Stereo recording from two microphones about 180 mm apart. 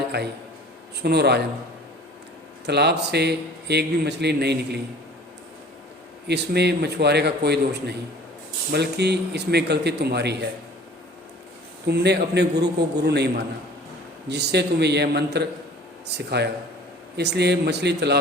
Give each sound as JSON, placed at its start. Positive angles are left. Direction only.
{"t": 0.1, "sound": "a man's voice", "side_deg": -65}
{"t": 2.6, "sound": "a man's voice", "side_deg": -70}
{"t": 6.2, "sound": "a man's voice", "side_deg": -65}
{"t": 11.9, "sound": "a man's voice", "side_deg": -70}